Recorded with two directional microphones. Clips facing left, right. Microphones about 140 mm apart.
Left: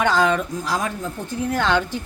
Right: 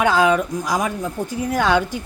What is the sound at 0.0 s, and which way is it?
Speech, 5° right (ahead or behind).